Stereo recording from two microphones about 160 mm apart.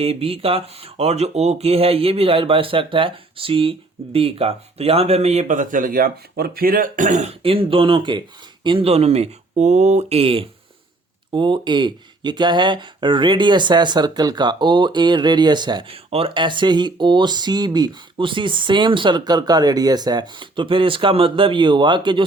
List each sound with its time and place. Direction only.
0.0 s speech: 40° right (ahead or behind)